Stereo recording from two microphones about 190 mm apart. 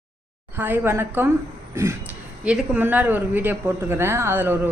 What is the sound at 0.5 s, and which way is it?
A woman's voice, 10° right (ahead or behind).